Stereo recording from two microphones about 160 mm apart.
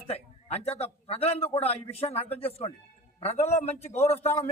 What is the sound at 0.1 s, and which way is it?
A man's voice, 40° left (ahead or behind).